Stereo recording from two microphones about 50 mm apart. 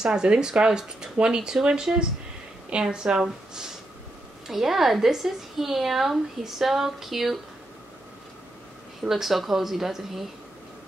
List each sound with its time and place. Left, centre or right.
0.0 s speech: centre
9.1 s speech: centre